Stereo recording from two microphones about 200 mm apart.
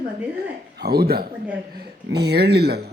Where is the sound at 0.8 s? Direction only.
50° right (ahead or behind).